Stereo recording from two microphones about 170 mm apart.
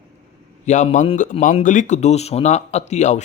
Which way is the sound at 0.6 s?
45° left (ahead or behind).